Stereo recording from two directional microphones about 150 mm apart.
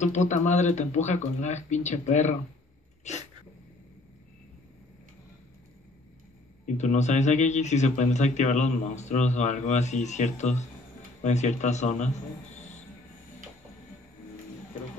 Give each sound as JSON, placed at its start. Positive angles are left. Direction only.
{"t": 0.0, "sound": "speech", "side_deg": 50}
{"t": 3.0, "sound": "sneeze", "side_deg": 50}
{"t": 6.6, "sound": "speech", "side_deg": 50}